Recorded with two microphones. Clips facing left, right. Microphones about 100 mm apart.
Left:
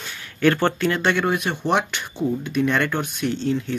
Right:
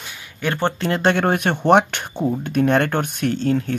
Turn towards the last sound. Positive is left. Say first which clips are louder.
# right 3 dB
turn(degrees=-50)  # may be behind; listen again after turning